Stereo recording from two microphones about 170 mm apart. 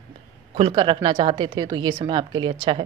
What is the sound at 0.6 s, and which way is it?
A woman's voice, 30° right (ahead or behind).